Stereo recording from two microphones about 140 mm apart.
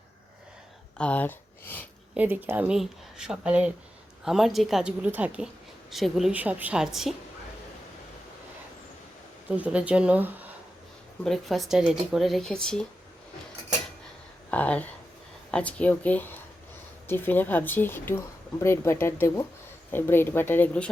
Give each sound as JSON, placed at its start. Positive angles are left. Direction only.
{"t": 0.9, "sound": "speech", "side_deg": 10}
{"t": 2.1, "sound": "a woman's voice", "side_deg": -10}
{"t": 9.5, "sound": "a woman's voice", "side_deg": -10}
{"t": 11.2, "sound": "speech", "side_deg": 0}
{"t": 14.5, "sound": "speech", "side_deg": 10}